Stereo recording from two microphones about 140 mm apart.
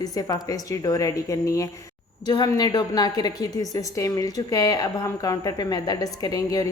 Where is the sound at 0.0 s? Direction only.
25° left (ahead or behind).